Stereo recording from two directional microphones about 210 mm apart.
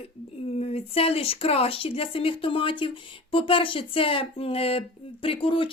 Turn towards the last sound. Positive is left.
turn(degrees=25)  # may be behind; listen again after turning